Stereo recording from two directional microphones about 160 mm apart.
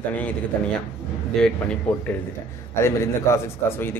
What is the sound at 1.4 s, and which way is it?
Speech, 5° left (ahead or behind).